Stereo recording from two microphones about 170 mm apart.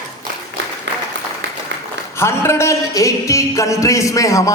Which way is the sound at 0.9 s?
90° right.